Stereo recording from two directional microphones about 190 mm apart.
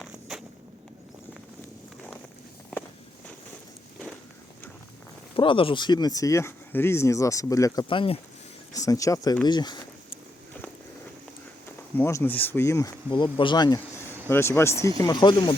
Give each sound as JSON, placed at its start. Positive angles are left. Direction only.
{"t": 0.0, "sound": "a sound", "side_deg": 0}
{"t": 5.4, "sound": "speech", "side_deg": 25}
{"t": 11.9, "sound": "speech", "side_deg": 10}
{"t": 13.1, "sound": "speech", "side_deg": 25}